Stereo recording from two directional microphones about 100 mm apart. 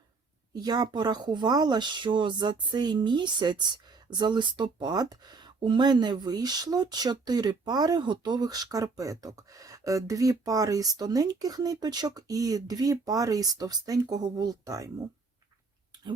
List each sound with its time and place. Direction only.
0.5 s speech: 45° right (ahead or behind)